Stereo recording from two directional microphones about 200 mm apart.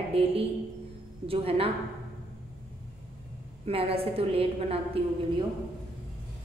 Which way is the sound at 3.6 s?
30° right (ahead or behind).